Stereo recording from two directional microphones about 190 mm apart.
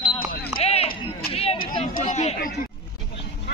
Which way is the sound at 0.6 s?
30° left (ahead or behind).